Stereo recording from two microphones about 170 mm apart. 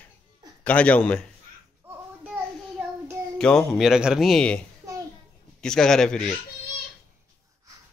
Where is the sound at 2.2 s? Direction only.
10° right (ahead or behind).